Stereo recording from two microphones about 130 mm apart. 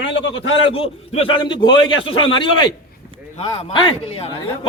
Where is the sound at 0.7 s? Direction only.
50° left (ahead or behind).